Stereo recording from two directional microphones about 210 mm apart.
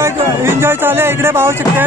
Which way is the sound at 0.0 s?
10° right (ahead or behind).